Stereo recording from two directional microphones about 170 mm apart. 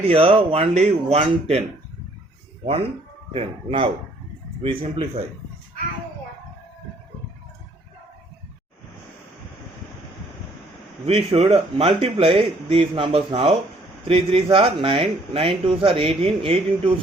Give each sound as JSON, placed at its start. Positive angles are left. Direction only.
{"t": 0.1, "sound": "speech", "side_deg": -35}
{"t": 3.3, "sound": "speech", "side_deg": -35}
{"t": 11.0, "sound": "speech", "side_deg": -35}